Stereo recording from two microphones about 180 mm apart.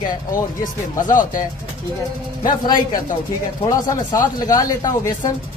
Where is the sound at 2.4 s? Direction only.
25° left (ahead or behind).